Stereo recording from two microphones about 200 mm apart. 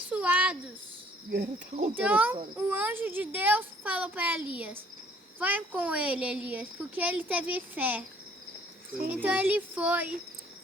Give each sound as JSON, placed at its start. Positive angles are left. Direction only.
{"t": 0.1, "sound": "a sound", "side_deg": -5}
{"t": 1.3, "sound": "cricket", "side_deg": -55}
{"t": 2.0, "sound": "speech", "side_deg": -10}
{"t": 9.2, "sound": "speech", "side_deg": -10}